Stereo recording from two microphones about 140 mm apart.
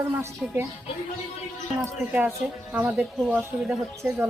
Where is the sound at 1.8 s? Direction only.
15° right (ahead or behind).